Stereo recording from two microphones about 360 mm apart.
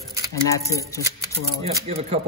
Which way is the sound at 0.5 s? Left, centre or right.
Centre.